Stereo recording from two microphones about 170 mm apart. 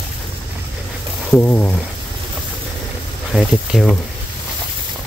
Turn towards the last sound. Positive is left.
turn(degrees=0)  # may be behind; listen again after turning